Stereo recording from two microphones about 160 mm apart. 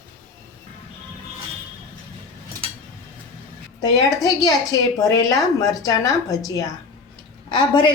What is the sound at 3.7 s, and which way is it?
A woman's voice, 25° left (ahead or behind).